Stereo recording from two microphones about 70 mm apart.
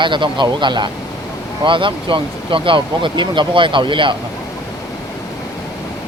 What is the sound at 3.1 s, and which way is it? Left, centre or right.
Speech, right.